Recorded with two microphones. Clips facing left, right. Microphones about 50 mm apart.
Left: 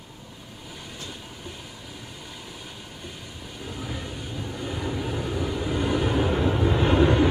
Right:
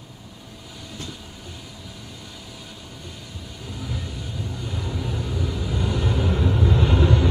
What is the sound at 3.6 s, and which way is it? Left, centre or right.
Vehicle, centre.